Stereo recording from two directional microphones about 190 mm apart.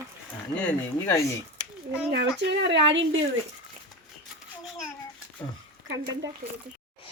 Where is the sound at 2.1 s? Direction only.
65° right (ahead or behind).